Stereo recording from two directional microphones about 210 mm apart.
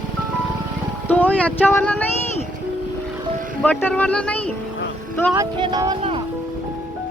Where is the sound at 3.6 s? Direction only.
5° left (ahead or behind).